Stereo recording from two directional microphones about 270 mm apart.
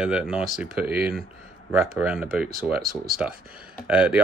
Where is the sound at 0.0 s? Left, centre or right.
Centre.